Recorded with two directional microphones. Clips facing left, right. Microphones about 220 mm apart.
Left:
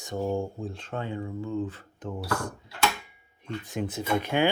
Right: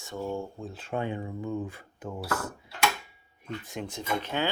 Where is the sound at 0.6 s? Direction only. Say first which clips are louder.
Right 1 dB; 5° right (ahead or behind).